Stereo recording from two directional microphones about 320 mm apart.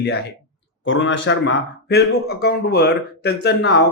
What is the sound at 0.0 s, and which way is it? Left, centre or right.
Speech, left.